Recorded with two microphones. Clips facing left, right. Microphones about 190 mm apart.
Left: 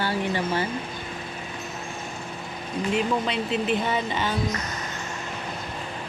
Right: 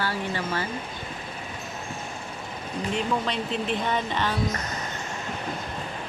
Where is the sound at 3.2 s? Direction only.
5° left (ahead or behind).